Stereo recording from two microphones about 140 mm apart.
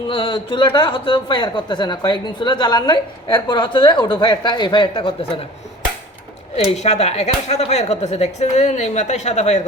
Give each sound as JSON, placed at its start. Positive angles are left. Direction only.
{"t": 0.1, "sound": "speech", "side_deg": 40}
{"t": 6.7, "sound": "speech", "side_deg": 50}